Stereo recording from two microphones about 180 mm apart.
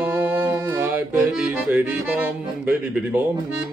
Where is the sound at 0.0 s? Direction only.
10° right (ahead or behind).